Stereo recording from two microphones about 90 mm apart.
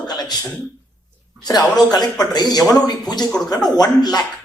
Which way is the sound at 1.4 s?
45° left (ahead or behind).